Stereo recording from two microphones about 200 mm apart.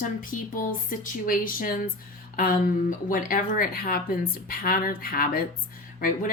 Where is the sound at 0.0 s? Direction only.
45° left (ahead or behind).